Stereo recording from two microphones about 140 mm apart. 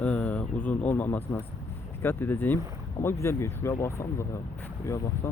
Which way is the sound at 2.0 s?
15° left (ahead or behind).